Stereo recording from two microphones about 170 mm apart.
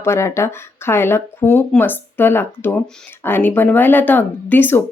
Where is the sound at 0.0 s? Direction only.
15° left (ahead or behind).